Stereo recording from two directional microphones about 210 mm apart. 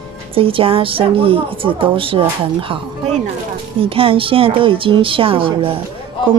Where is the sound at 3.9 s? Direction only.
25° right (ahead or behind).